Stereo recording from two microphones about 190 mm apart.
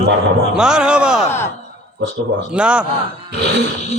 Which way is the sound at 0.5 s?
5° right (ahead or behind).